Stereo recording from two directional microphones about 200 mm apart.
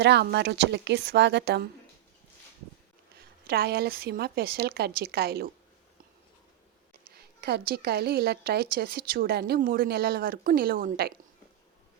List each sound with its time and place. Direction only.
0.0 s speech: 55° right (ahead or behind)
3.2 s a woman's voice: 50° right (ahead or behind)
7.1 s a woman's voice: 55° right (ahead or behind)